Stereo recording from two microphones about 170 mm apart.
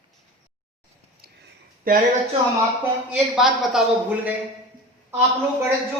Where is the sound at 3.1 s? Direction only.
5° right (ahead or behind).